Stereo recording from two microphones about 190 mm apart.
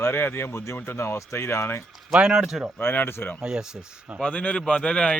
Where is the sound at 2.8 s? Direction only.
10° left (ahead or behind).